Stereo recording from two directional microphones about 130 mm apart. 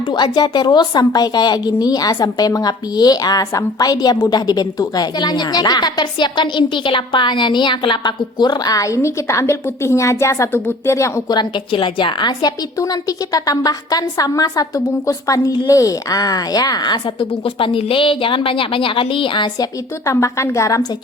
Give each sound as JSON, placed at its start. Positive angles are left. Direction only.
{"t": 0.1, "sound": "a woman's voice", "side_deg": 35}
{"t": 20.1, "sound": "a woman's voice", "side_deg": 25}